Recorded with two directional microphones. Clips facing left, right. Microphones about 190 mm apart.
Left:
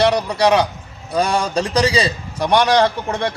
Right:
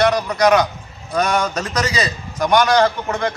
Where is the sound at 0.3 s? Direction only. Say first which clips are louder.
Right 1 dB; 30° left (ahead or behind).